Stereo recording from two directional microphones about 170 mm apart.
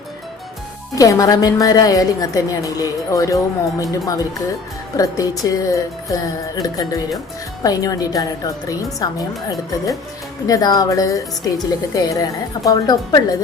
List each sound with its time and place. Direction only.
0.9 s a woman's voice: 20° left (ahead or behind)